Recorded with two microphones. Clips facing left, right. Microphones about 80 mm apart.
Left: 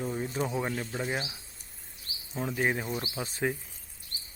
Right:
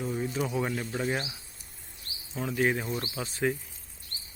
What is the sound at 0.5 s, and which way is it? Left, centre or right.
Speech, centre.